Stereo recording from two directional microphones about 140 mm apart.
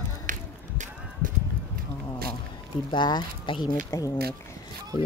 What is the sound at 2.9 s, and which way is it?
Speech, 30° left (ahead or behind).